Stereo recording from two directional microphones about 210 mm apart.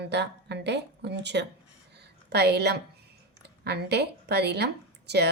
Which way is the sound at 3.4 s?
50° right (ahead or behind).